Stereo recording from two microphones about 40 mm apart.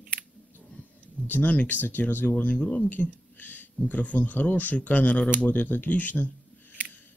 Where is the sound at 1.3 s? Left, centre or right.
Left.